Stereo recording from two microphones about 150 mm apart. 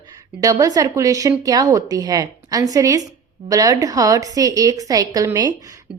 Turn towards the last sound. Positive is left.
turn(degrees=-25)  # may be behind; listen again after turning